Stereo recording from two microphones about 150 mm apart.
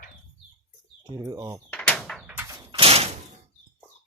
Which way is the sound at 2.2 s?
20° right (ahead or behind).